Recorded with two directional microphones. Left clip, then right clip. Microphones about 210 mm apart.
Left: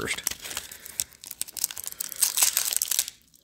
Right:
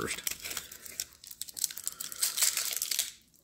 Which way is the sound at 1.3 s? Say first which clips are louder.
Left 4 dB; 40° left (ahead or behind).